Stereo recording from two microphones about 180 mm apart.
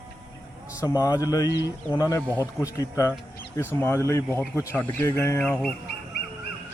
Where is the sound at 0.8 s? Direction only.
20° left (ahead or behind).